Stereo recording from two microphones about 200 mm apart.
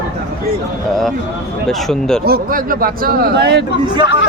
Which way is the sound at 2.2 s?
45° right (ahead or behind).